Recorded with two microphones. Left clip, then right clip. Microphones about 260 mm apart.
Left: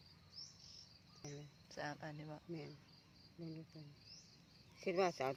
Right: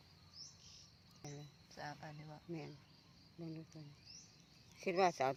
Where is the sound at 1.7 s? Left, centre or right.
Left.